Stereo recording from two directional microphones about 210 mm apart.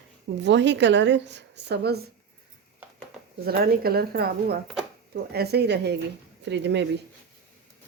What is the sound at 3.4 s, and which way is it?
A woman's voice, 45° right (ahead or behind).